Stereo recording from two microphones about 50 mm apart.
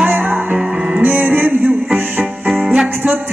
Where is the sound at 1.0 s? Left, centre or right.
Right.